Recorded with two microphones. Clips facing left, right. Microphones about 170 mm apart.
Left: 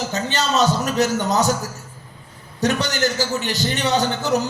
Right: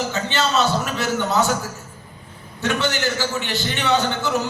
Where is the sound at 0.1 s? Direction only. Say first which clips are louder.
Even; 40° left (ahead or behind).